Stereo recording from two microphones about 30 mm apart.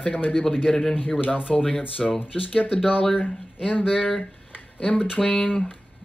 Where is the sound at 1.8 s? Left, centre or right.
Left.